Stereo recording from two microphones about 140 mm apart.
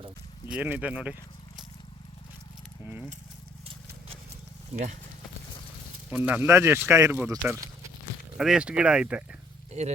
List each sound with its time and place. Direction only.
0.4 s speech: 10° right (ahead or behind)
6.1 s speech: 10° right (ahead or behind)
8.4 s speech: 5° right (ahead or behind)
9.7 s speech: 50° right (ahead or behind)